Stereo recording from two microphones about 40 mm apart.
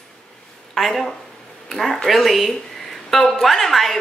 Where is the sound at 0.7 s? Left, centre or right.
Centre.